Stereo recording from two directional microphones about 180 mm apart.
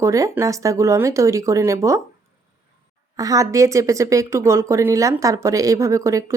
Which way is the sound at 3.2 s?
20° right (ahead or behind).